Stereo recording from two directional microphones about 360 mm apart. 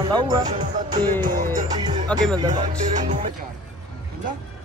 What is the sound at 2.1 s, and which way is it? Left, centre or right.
Speech, centre.